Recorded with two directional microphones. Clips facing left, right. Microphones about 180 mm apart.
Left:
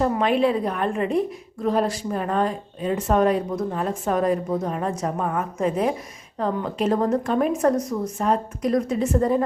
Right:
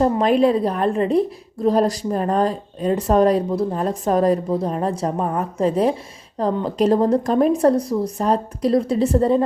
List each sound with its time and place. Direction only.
0.0 s a woman's voice: 40° right (ahead or behind)